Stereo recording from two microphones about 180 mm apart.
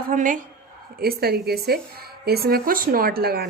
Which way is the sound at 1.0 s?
60° right (ahead or behind).